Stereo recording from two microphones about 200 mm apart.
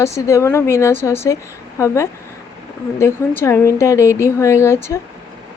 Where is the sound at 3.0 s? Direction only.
15° left (ahead or behind).